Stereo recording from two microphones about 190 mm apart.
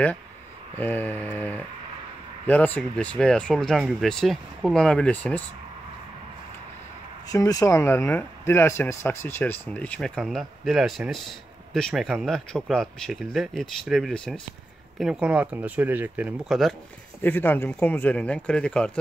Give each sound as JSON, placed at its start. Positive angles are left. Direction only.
{"t": 0.7, "sound": "speech", "side_deg": 10}
{"t": 7.2, "sound": "speech", "side_deg": 20}
{"t": 17.2, "sound": "speech", "side_deg": 10}